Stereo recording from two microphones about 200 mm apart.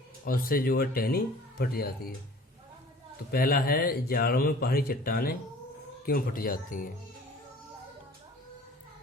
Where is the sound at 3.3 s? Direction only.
50° left (ahead or behind).